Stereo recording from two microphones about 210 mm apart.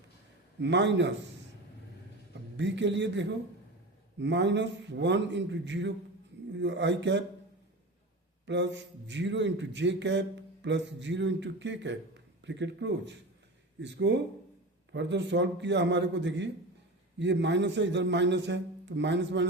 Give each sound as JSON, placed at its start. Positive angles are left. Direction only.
{"t": 0.6, "sound": "a man's voice", "side_deg": -55}
{"t": 2.6, "sound": "a man's voice", "side_deg": -55}
{"t": 8.4, "sound": "a man's voice", "side_deg": -55}